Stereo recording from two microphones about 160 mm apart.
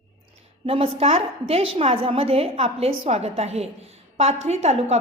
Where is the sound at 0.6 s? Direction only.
40° right (ahead or behind).